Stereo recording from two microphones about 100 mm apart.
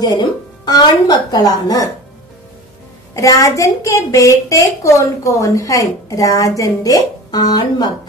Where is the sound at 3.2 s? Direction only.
30° left (ahead or behind).